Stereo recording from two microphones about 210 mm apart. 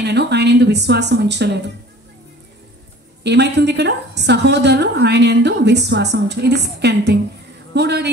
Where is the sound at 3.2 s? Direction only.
55° right (ahead or behind).